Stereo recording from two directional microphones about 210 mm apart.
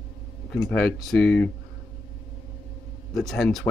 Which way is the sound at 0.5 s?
5° left (ahead or behind).